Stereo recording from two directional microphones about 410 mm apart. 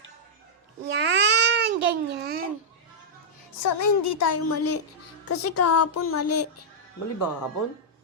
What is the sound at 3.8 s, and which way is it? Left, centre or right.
Speech, left.